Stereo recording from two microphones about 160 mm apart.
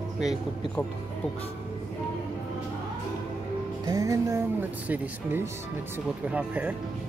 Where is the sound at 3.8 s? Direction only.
20° right (ahead or behind).